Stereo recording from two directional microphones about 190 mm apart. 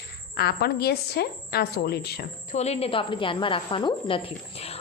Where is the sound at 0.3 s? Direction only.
55° left (ahead or behind).